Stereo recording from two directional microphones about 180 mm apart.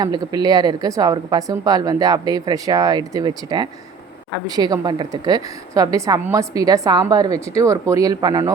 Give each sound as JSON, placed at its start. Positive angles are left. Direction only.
{"t": 0.0, "sound": "a woman's voice", "side_deg": -20}